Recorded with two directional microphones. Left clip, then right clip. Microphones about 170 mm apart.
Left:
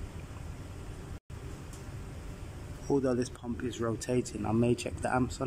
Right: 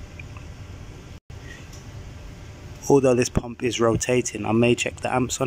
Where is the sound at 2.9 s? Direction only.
15° right (ahead or behind).